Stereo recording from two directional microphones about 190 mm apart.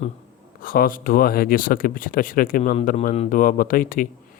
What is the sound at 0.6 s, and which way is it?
Speech, 50° left (ahead or behind).